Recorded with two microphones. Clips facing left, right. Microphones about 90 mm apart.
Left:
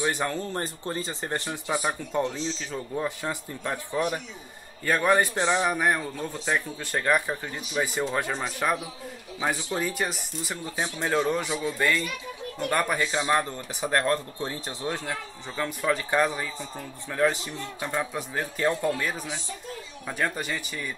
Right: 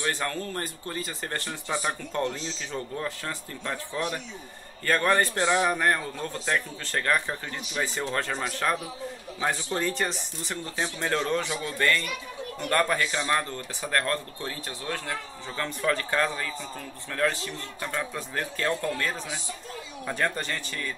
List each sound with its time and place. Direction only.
0.0 s a man's voice: 15° left (ahead or behind)
15.5 s a man's voice: 10° left (ahead or behind)